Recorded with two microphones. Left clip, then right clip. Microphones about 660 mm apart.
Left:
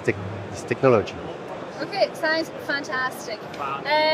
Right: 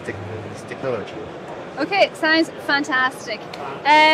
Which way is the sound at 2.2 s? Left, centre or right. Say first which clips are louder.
Right 6 dB; right.